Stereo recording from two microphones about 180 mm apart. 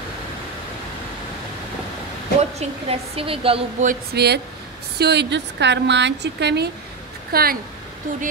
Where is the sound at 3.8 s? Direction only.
65° right (ahead or behind).